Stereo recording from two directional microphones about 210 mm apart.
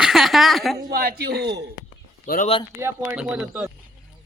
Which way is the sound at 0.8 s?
45° right (ahead or behind).